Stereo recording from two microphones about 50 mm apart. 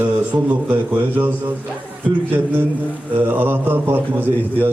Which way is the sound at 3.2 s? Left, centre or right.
Right.